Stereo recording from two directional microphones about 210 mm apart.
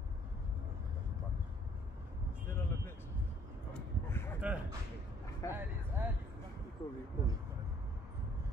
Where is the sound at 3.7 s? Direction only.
10° left (ahead or behind).